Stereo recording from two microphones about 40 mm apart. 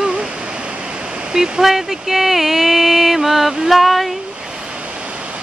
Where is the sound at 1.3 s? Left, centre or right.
Centre.